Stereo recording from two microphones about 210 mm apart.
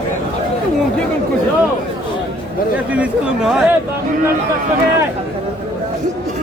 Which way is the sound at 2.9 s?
5° right (ahead or behind).